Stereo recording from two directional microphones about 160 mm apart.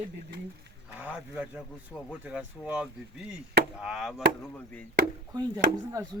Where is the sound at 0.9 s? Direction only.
10° right (ahead or behind).